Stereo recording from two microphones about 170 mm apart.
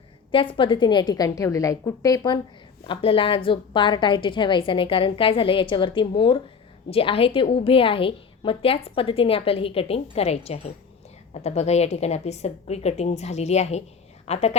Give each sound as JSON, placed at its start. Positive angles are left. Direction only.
{"t": 0.3, "sound": "a woman's voice", "side_deg": 30}